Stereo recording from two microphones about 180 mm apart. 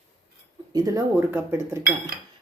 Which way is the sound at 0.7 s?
20° right (ahead or behind).